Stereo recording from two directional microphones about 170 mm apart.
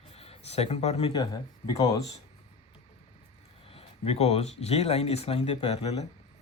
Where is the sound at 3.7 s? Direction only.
35° left (ahead or behind).